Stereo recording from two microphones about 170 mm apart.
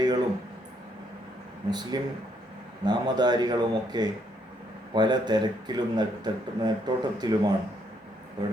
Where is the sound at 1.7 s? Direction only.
25° right (ahead or behind).